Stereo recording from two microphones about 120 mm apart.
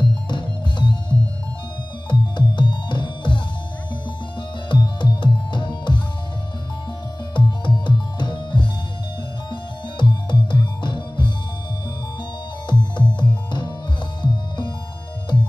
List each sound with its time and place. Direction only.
0.0 s music: 40° left (ahead or behind)
2.0 s music: 40° left (ahead or behind)
7.3 s music: 35° left (ahead or behind)
12.9 s music: 40° left (ahead or behind)